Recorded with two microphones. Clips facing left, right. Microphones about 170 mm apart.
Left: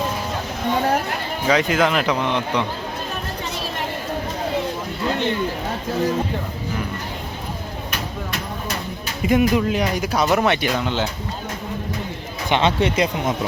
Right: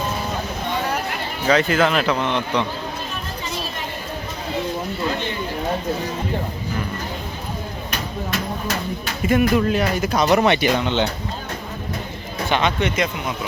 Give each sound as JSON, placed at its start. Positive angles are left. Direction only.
{"t": 1.5, "sound": "speech", "side_deg": 10}
{"t": 9.2, "sound": "speech", "side_deg": 15}
{"t": 12.5, "sound": "speech", "side_deg": 25}